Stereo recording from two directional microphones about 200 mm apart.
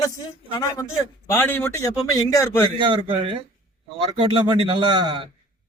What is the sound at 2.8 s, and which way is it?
A man's voice, 25° right (ahead or behind).